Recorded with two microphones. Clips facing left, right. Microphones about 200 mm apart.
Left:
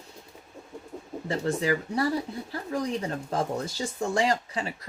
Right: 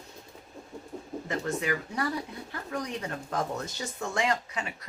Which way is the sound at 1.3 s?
30° left (ahead or behind).